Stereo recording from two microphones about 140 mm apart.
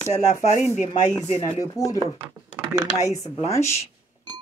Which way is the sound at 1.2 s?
45° left (ahead or behind).